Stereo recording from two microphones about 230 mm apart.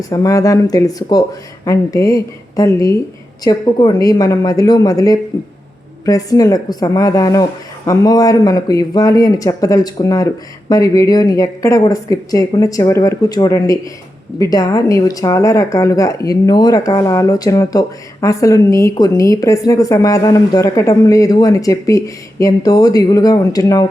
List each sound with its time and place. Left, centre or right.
0.0 s speech: centre